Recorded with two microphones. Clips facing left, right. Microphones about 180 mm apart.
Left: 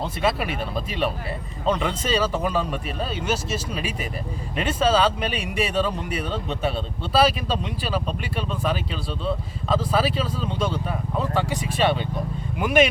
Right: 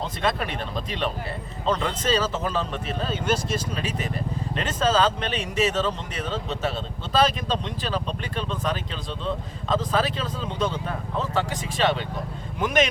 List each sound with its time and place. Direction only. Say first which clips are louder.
0.2 s speech: left 2 dB; 5° left (ahead or behind)
1.7 s speech: even; 10° left (ahead or behind)